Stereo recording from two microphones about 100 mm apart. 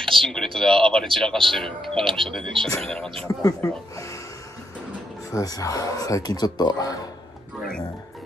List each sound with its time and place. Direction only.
0.0 s speech: 5° left (ahead or behind)
3.3 s speech: 35° left (ahead or behind)
5.3 s speech: 35° left (ahead or behind)